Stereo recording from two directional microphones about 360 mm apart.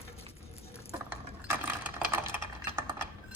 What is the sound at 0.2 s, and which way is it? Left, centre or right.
Patter, centre.